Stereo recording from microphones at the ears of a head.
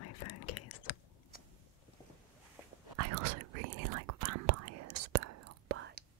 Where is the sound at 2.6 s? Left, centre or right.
Right.